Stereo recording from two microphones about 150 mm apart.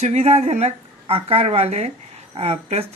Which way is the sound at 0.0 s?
45° right (ahead or behind).